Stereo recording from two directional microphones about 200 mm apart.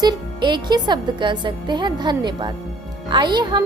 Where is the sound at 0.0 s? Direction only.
20° right (ahead or behind).